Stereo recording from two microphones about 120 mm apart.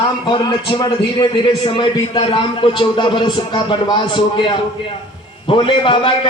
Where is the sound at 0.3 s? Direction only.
40° left (ahead or behind).